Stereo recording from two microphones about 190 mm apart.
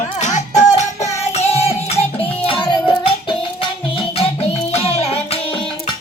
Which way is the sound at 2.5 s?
25° left (ahead or behind).